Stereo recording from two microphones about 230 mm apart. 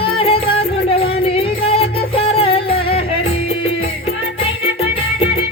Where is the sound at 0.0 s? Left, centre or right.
Left.